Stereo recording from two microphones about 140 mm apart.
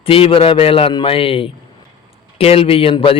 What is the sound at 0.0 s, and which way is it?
A man's voice, 40° left (ahead or behind).